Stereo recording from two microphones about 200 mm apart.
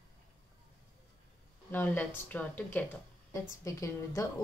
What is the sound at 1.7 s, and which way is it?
Speech, 10° left (ahead or behind).